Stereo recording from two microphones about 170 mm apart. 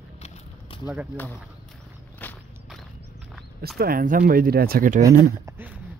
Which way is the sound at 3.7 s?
60° right (ahead or behind).